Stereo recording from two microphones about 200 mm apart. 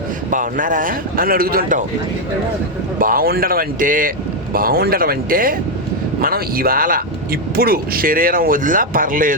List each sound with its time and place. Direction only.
0.3 s speech: 40° right (ahead or behind)
3.0 s speech: 45° right (ahead or behind)